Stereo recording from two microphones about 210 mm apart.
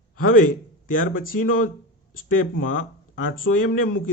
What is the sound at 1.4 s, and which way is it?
A man's voice, 40° left (ahead or behind).